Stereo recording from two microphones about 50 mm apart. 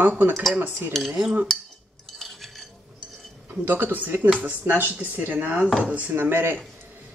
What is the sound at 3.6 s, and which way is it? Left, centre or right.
Speech, right.